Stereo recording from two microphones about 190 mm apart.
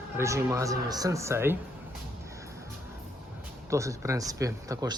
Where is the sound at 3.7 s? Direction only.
15° right (ahead or behind).